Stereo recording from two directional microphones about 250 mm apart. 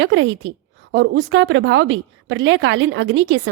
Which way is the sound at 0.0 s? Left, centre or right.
Right.